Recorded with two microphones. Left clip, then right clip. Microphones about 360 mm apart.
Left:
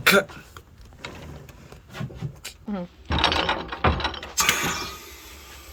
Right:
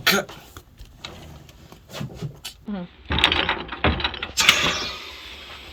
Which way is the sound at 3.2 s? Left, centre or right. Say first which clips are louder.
Right 2 dB; left.